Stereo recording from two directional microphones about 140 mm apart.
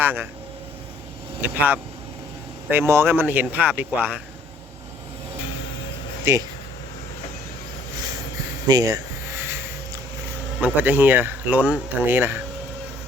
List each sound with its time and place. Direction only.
0.0 s speech: 15° right (ahead or behind)
1.4 s speech: 10° right (ahead or behind)
6.3 s speech: 20° right (ahead or behind)
8.6 s speech: 25° right (ahead or behind)
10.6 s speech: 15° right (ahead or behind)